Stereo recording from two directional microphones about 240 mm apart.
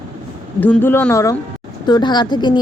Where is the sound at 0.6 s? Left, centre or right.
Centre.